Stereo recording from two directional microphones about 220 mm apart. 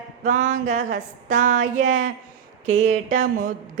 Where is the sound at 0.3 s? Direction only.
35° right (ahead or behind).